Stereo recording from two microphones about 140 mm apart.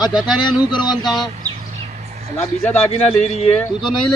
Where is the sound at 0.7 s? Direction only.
30° left (ahead or behind).